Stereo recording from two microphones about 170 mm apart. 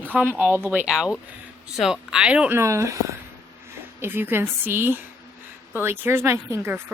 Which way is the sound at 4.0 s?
10° right (ahead or behind).